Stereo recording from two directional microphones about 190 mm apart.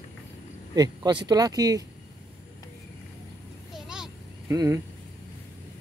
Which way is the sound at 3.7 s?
5° right (ahead or behind).